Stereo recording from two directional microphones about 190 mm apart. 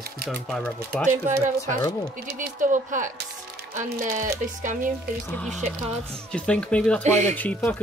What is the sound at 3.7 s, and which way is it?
Music, 40° right (ahead or behind).